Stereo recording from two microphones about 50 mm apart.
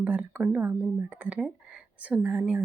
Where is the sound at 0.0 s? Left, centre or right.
Right.